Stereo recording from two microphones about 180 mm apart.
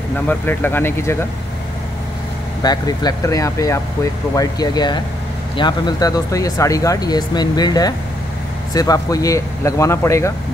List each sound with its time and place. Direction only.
0.3 s speech: 10° left (ahead or behind)
2.6 s speech: 20° left (ahead or behind)